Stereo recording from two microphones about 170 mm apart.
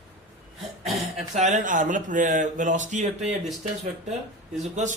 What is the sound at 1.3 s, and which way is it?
Speech, 45° right (ahead or behind).